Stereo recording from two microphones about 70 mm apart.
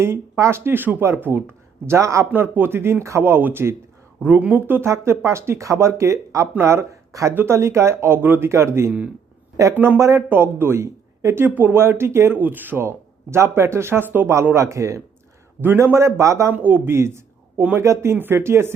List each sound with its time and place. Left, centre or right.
0.0 s speech: right
2.0 s speech: right
2.3 s speech: right
4.2 s speech: right
4.6 s speech: right
9.7 s speech: right
10.0 s speech: right
10.2 s speech: right
11.4 s speech: right
13.3 s speech: right
14.5 s speech: right
15.6 s speech: right
16.5 s speech: right